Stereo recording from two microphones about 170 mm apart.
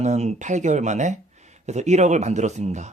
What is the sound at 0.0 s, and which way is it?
Speech, 40° right (ahead or behind).